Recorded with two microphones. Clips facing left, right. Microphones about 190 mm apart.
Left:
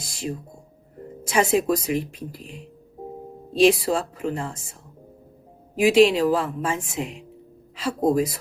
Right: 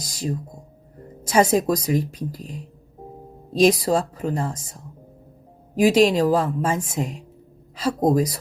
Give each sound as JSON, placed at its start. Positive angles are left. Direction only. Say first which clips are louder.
{"t": 0.0, "sound": "music", "louder": "right 2 dB", "side_deg": -40}
{"t": 1.3, "sound": "speech", "louder": "right 2 dB", "side_deg": -40}